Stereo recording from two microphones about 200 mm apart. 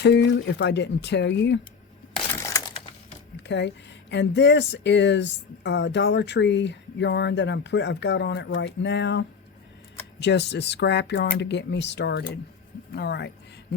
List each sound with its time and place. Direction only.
0.0 s speech: 60° left (ahead or behind)
3.3 s a sound: 60° left (ahead or behind)
4.1 s speech: 60° left (ahead or behind)